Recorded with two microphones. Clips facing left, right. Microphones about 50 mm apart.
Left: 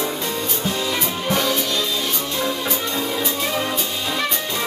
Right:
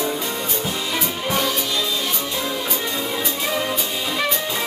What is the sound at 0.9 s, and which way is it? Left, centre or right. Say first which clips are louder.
Music: left 1 dB; centre.